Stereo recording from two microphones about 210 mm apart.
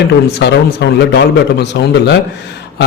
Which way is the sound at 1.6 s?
55° left (ahead or behind).